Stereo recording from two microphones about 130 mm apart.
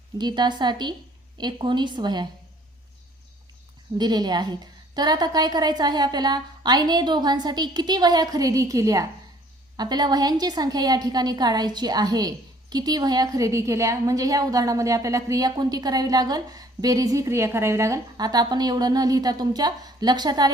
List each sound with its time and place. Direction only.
0.2 s a woman's voice: 35° right (ahead or behind)
3.9 s a woman's voice: 35° right (ahead or behind)